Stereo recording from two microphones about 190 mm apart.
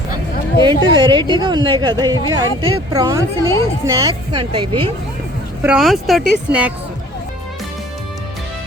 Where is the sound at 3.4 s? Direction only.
15° left (ahead or behind).